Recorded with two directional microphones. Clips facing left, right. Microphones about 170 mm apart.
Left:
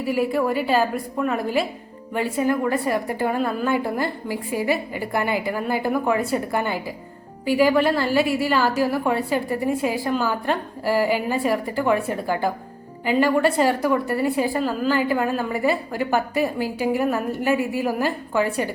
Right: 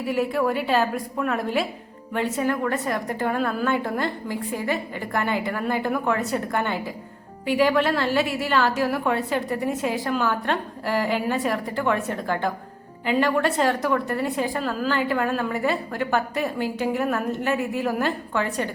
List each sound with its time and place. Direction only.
0.0 s a woman's voice: centre (ahead or behind)